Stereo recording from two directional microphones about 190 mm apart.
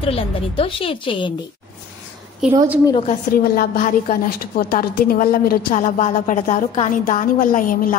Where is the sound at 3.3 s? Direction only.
50° left (ahead or behind).